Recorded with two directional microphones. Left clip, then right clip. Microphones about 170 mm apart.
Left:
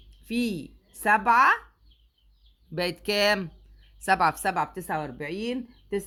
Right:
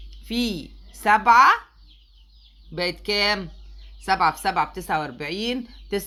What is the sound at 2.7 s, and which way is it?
Speech, 40° left (ahead or behind).